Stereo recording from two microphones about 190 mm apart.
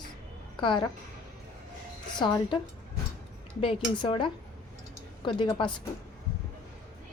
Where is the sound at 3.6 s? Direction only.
25° left (ahead or behind).